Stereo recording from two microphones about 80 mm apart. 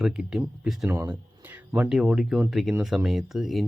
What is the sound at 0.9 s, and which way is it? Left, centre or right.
Speech, right.